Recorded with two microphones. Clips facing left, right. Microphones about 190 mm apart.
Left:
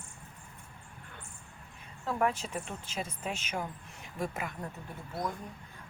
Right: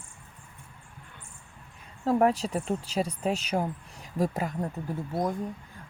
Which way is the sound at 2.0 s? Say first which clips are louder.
Right 8 dB; 35° right (ahead or behind).